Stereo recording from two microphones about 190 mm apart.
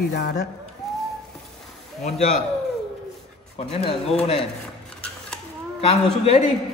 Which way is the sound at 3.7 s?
30° left (ahead or behind).